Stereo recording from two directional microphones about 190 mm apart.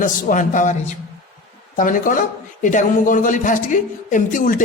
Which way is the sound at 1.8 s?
45° left (ahead or behind).